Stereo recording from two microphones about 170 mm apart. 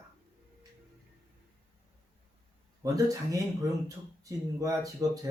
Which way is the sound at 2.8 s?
20° right (ahead or behind).